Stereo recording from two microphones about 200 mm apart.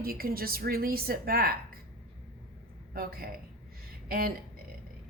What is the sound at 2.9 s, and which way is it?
Speech, 45° right (ahead or behind).